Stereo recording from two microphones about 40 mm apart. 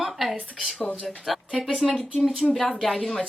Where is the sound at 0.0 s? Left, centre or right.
Centre.